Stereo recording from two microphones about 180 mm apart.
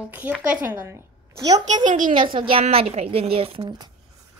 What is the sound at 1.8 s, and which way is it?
Speech, 45° right (ahead or behind).